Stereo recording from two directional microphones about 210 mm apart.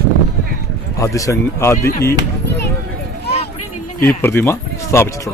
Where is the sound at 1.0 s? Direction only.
15° left (ahead or behind).